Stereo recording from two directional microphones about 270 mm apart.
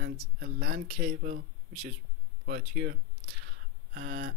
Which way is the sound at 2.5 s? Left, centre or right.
Right.